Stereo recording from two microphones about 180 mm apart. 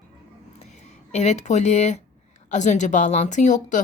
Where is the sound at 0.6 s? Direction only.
40° left (ahead or behind).